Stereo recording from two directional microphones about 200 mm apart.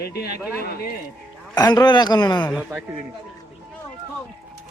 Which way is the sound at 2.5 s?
10° right (ahead or behind).